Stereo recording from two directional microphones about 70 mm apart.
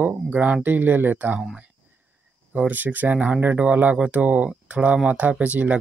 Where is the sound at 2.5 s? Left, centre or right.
Right.